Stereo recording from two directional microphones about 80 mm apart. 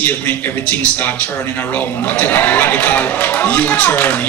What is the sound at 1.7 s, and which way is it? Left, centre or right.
Speech, left.